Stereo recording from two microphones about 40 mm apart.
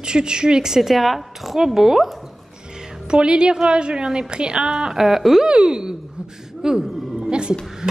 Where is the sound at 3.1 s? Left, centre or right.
Right.